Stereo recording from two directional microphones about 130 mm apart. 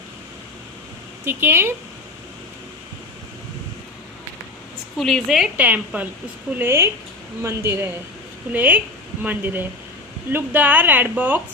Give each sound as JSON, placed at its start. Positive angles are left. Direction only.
{"t": 1.2, "sound": "a woman's voice", "side_deg": -15}
{"t": 4.9, "sound": "a woman's voice", "side_deg": 0}
{"t": 5.5, "sound": "a woman's voice", "side_deg": -15}